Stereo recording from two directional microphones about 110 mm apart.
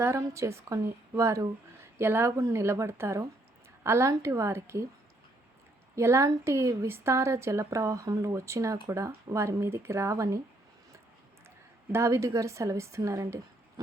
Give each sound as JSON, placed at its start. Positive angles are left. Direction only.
{"t": 0.0, "sound": "speech", "side_deg": -25}
{"t": 6.0, "sound": "speech", "side_deg": -25}
{"t": 11.9, "sound": "speech", "side_deg": -25}